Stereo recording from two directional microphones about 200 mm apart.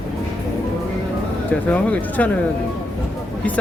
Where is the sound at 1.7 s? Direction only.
5° left (ahead or behind).